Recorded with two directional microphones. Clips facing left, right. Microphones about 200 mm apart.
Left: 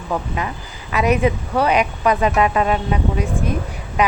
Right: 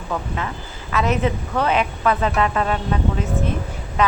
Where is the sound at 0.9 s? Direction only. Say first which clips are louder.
Left 3 dB; 15° left (ahead or behind).